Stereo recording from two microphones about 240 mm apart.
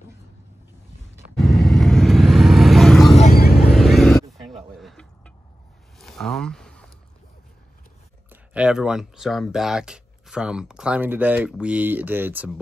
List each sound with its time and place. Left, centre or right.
1.4 s vehicle: centre
3.1 s vehicle: left
3.7 s vehicle: centre
4.7 s a sound: centre
8.3 s speech: centre